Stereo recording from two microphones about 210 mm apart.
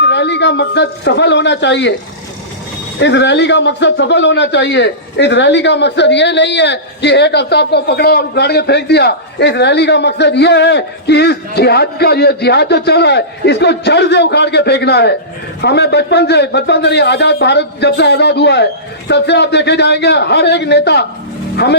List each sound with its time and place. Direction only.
0.0 s speech: 55° left (ahead or behind)
3.0 s a man's voice: 55° left (ahead or behind)